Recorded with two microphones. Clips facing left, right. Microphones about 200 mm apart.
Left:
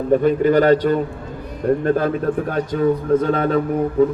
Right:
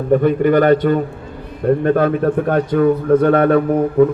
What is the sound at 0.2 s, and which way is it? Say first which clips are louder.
A man's voice: right 2 dB; 55° right (ahead or behind).